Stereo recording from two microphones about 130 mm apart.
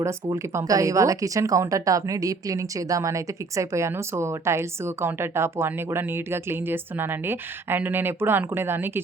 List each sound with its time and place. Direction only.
0.0 s speech: 25° right (ahead or behind)